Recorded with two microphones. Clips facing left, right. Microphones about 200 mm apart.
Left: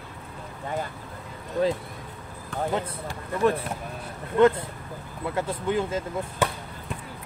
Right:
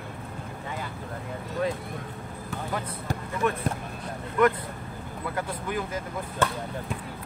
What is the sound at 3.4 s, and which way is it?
Speech, 30° left (ahead or behind).